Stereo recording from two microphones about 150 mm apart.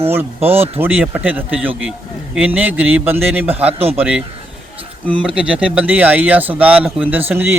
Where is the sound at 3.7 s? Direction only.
40° right (ahead or behind).